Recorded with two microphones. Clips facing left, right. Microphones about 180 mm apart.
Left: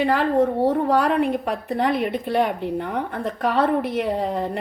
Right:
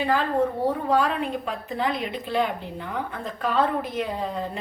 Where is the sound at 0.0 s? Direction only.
70° left (ahead or behind).